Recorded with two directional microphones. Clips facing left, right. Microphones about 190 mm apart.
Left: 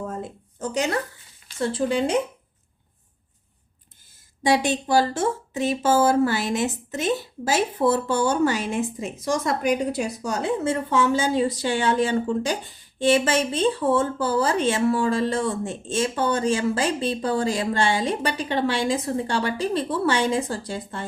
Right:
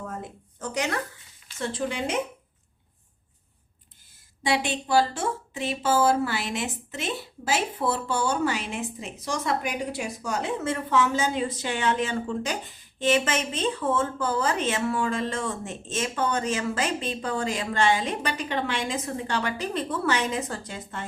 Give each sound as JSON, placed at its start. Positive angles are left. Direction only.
{"t": 0.1, "sound": "a sound", "side_deg": 30}
{"t": 1.5, "sound": "speech", "side_deg": 35}
{"t": 4.4, "sound": "speech", "side_deg": 40}